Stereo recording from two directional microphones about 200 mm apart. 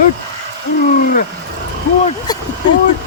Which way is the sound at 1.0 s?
45° left (ahead or behind).